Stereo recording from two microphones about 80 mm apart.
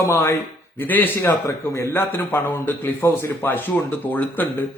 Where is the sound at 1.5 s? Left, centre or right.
Left.